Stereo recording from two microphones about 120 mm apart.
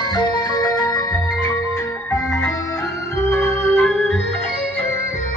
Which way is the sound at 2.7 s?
25° left (ahead or behind).